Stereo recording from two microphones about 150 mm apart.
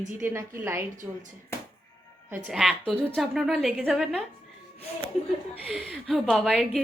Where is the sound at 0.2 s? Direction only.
15° right (ahead or behind).